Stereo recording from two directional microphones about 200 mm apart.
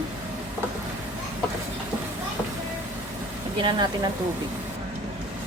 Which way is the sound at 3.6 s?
20° right (ahead or behind).